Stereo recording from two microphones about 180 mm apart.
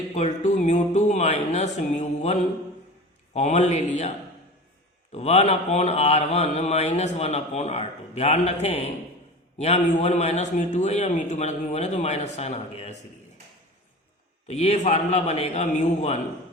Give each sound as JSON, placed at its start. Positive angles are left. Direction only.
{"t": 0.1, "sound": "speech", "side_deg": 40}
{"t": 5.1, "sound": "speech", "side_deg": 35}
{"t": 14.4, "sound": "speech", "side_deg": 35}